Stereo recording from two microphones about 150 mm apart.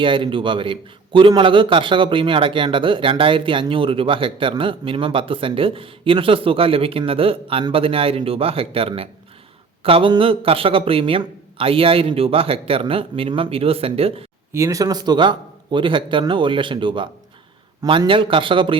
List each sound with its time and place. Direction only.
0.0 s a man's voice: 35° right (ahead or behind)
14.5 s a man's voice: 20° right (ahead or behind)